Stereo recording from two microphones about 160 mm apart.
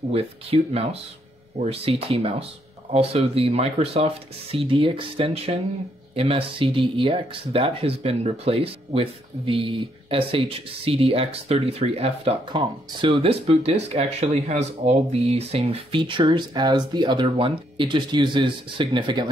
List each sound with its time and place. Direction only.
0.1 s speech: 40° right (ahead or behind)